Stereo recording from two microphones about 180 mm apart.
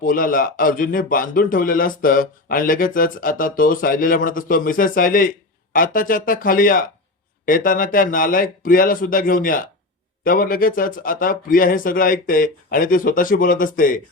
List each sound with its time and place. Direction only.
0.0 s a man's voice: 50° left (ahead or behind)